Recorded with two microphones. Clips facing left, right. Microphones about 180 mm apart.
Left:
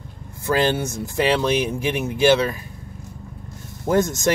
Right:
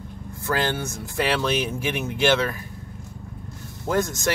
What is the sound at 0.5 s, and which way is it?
Speech, 20° left (ahead or behind).